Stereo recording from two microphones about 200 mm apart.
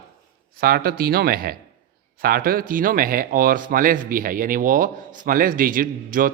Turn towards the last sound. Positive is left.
turn(degrees=-45)  # may be behind; listen again after turning